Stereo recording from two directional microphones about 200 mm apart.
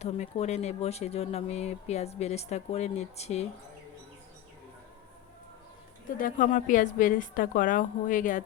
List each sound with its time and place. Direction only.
0.0 s speech: 35° left (ahead or behind)
6.1 s speech: 40° left (ahead or behind)